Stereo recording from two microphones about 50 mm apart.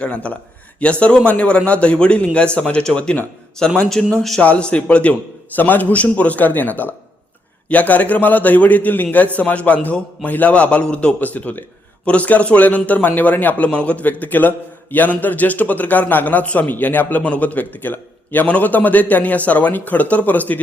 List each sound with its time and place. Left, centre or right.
0.0 s a man's voice: left
3.8 s a man's voice: centre
4.4 s a man's voice: left
5.5 s a man's voice: left
11.2 s a man's voice: left
13.7 s a man's voice: left